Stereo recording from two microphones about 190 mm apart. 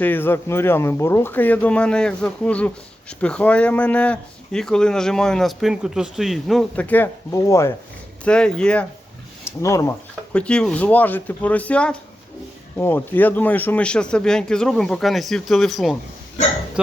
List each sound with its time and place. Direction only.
0.0 s speech: 10° left (ahead or behind)
8.2 s speech: 5° left (ahead or behind)
9.4 s speech: 15° left (ahead or behind)
10.3 s speech: 5° left (ahead or behind)